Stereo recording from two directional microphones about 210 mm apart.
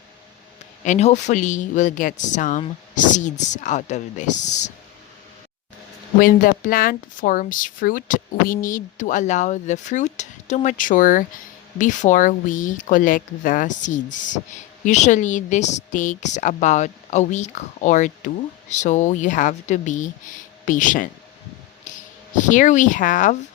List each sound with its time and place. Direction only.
0.9 s speech: 35° left (ahead or behind)
6.1 s speech: 40° left (ahead or behind)
21.9 s a sound: 35° left (ahead or behind)
22.4 s speech: 35° left (ahead or behind)